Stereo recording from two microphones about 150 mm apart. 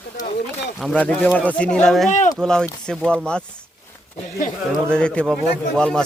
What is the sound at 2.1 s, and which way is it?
Speech, 55° left (ahead or behind).